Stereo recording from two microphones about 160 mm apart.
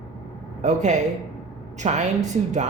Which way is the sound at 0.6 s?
45° right (ahead or behind).